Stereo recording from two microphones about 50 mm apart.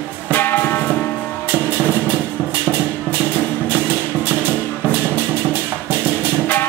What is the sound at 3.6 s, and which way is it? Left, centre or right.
Music, right.